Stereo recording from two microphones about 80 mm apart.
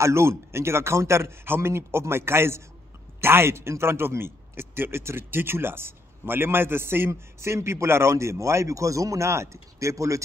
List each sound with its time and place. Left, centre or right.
0.0 s speech: right